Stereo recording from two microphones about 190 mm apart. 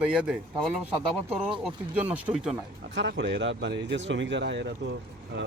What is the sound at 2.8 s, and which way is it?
Speech, 70° right (ahead or behind).